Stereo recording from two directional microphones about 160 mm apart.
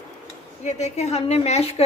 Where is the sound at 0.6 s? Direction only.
45° left (ahead or behind).